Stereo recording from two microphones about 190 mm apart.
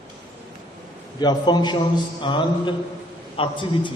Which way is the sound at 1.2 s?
25° left (ahead or behind).